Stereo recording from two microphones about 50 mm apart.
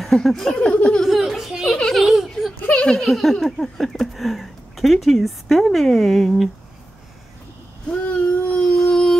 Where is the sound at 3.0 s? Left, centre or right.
Centre.